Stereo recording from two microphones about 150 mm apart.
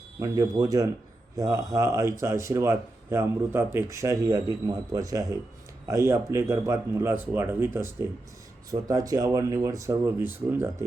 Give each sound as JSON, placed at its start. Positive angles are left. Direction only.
{"t": 0.2, "sound": "speech", "side_deg": -25}